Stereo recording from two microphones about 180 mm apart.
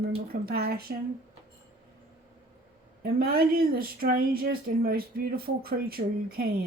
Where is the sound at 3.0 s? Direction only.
60° right (ahead or behind).